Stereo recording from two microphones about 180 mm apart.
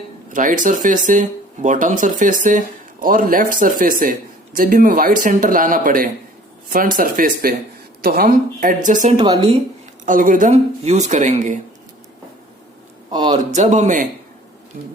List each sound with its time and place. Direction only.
0.3 s speech: 45° right (ahead or behind)
9.2 s speech: 30° right (ahead or behind)
10.1 s speech: 45° right (ahead or behind)
13.1 s speech: 25° right (ahead or behind)
13.5 s speech: 40° right (ahead or behind)